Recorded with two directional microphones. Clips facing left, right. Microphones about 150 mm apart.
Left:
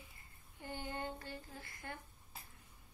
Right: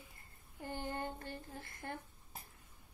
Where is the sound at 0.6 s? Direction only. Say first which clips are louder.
Right 2 dB; 45° right (ahead or behind).